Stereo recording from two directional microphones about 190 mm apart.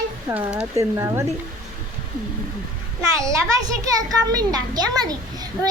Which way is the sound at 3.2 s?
20° right (ahead or behind).